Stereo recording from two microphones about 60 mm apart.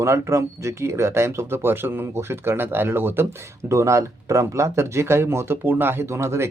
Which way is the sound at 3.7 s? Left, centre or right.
Right.